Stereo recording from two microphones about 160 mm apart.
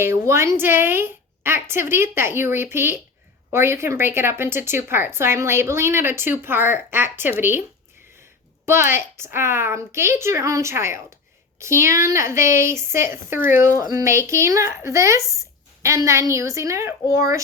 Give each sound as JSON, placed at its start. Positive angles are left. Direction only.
{"t": 0.0, "sound": "a woman's voice", "side_deg": -15}
{"t": 8.6, "sound": "a woman's voice", "side_deg": -15}